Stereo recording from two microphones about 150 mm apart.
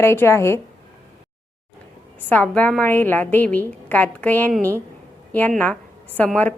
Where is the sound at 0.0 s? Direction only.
15° left (ahead or behind).